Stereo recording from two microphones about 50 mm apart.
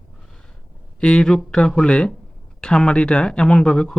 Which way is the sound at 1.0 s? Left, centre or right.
Centre.